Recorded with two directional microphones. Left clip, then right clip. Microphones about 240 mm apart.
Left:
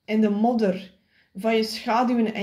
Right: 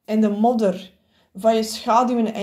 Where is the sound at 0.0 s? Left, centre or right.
Right.